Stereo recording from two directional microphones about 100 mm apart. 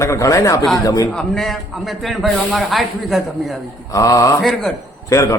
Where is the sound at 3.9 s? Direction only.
35° left (ahead or behind).